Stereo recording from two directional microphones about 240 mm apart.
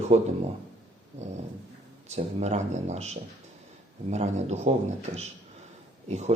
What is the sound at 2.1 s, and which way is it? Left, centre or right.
A man's voice, right.